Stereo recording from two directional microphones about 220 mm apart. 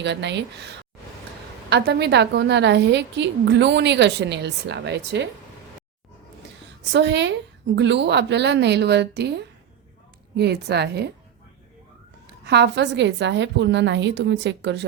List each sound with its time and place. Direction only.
0.0 s a woman's voice: 50° right (ahead or behind)
1.7 s a woman's voice: 50° right (ahead or behind)
6.9 s a woman's voice: 50° right (ahead or behind)
12.5 s a woman's voice: 50° right (ahead or behind)